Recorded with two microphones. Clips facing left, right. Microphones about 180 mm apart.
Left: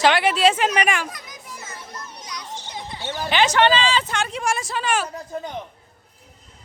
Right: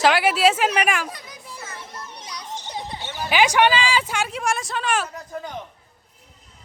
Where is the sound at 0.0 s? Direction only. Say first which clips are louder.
Even; 5° right (ahead or behind).